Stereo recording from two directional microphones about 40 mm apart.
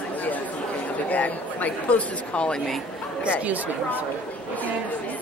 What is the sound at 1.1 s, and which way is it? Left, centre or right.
Speech, left.